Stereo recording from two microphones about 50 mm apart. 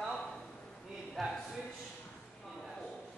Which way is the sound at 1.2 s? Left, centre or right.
Centre.